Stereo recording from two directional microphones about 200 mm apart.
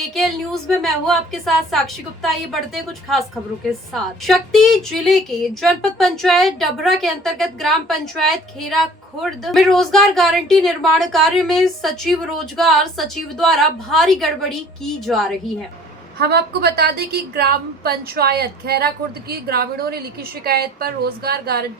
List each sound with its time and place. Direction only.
0.1 s a woman's voice: centre (ahead or behind)
16.1 s a woman's voice: 55° right (ahead or behind)